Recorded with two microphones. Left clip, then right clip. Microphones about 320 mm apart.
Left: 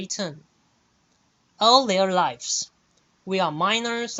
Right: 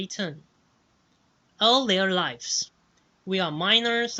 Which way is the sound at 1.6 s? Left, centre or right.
Centre.